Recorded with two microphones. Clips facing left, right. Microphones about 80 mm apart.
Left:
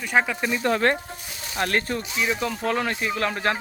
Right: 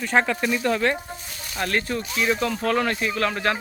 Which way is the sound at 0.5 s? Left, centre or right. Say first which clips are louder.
Left 2 dB; left.